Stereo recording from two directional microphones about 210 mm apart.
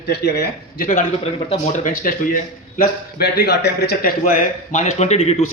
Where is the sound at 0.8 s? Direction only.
40° left (ahead or behind).